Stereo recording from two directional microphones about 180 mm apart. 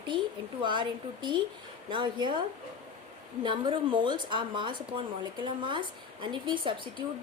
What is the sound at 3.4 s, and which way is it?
A woman's voice, 25° right (ahead or behind).